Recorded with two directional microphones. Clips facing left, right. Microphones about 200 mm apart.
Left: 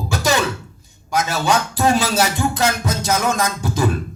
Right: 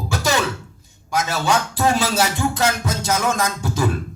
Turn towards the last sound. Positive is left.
turn(degrees=20)  # may be behind; listen again after turning